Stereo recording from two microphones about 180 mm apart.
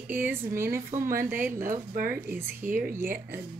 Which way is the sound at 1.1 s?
50° right (ahead or behind).